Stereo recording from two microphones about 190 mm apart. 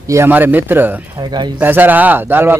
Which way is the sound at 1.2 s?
20° right (ahead or behind).